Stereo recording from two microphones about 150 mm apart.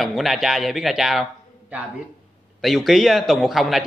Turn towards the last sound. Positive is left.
turn(degrees=0)  # may be behind; listen again after turning